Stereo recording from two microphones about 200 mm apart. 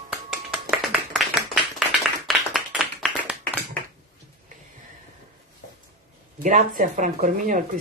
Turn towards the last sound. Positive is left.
turn(degrees=-45)  # may be behind; listen again after turning